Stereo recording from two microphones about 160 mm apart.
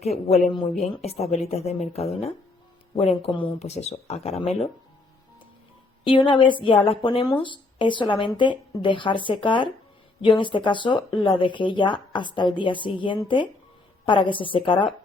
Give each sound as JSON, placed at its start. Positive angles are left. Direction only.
{"t": 0.0, "sound": "speech", "side_deg": 45}
{"t": 3.6, "sound": "speech", "side_deg": 45}
{"t": 6.1, "sound": "speech", "side_deg": 30}